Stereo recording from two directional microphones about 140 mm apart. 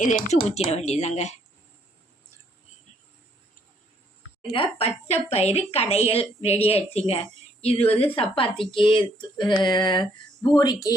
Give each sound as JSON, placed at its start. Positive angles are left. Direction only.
{"t": 0.0, "sound": "speech", "side_deg": 65}
{"t": 0.5, "sound": "a woman's voice", "side_deg": 50}
{"t": 4.4, "sound": "a woman's voice", "side_deg": 40}
{"t": 7.6, "sound": "a sound", "side_deg": 45}